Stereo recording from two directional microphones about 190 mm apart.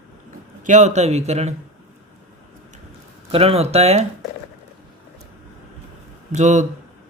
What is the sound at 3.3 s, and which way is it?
Speech, 30° right (ahead or behind).